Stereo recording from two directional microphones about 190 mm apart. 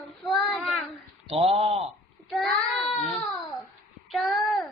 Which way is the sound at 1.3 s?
30° right (ahead or behind).